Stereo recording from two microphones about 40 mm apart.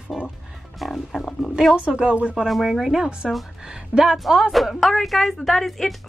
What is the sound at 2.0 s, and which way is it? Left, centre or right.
Speech, right.